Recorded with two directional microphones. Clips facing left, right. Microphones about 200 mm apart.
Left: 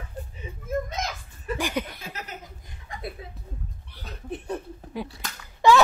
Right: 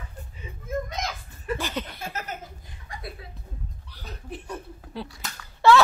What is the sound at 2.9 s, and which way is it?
Speech, 20° left (ahead or behind).